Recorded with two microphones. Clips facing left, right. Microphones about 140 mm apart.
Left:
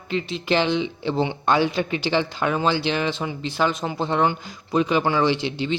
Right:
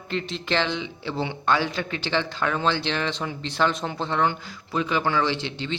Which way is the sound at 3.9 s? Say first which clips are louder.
Left 5 dB; 15° left (ahead or behind).